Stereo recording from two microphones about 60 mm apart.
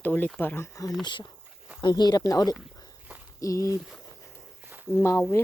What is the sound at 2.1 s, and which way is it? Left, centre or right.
Speech, left.